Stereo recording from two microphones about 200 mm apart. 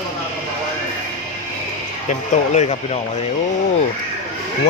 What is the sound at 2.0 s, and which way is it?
Speech, 35° left (ahead or behind).